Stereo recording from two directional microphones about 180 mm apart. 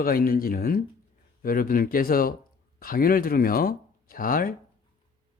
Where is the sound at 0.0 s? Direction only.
55° left (ahead or behind).